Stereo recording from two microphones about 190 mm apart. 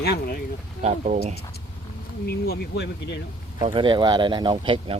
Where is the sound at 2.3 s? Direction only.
60° left (ahead or behind).